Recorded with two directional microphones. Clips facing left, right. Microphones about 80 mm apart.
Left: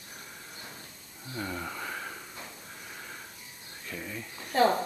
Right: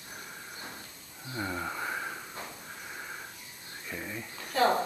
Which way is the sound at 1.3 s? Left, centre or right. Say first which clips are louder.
Right 1 dB; centre.